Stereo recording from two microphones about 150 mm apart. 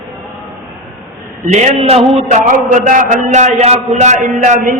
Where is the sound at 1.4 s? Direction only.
50° right (ahead or behind).